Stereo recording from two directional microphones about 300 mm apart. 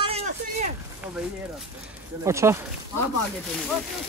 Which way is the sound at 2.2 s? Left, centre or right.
Centre.